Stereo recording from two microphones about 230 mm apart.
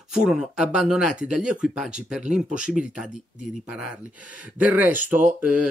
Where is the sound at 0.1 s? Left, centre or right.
Centre.